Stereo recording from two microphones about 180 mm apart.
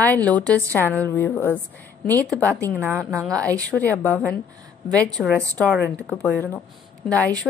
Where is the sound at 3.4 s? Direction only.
5° left (ahead or behind).